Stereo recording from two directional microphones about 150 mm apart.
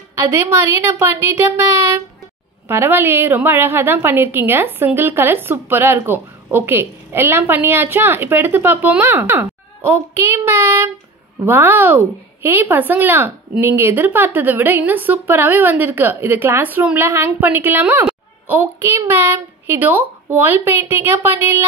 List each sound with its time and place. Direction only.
0.3 s a woman's voice: 15° right (ahead or behind)
9.8 s child singing: 15° right (ahead or behind)
11.4 s a woman's voice: 15° right (ahead or behind)